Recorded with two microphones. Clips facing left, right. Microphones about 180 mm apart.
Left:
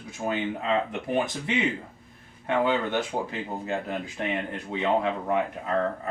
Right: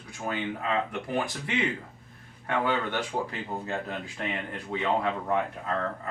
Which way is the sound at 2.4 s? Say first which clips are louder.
Left 3 dB; 20° left (ahead or behind).